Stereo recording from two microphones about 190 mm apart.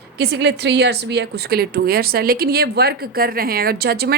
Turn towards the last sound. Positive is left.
turn(degrees=-55)  # may be behind; listen again after turning